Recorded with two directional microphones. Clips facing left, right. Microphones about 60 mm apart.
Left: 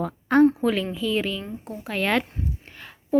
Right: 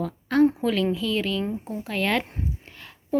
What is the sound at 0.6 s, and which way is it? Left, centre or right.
A woman's voice, centre.